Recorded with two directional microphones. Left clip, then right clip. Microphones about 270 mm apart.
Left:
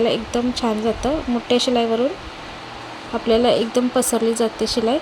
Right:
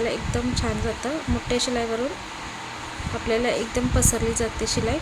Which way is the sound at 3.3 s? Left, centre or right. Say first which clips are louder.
Left 7 dB; centre.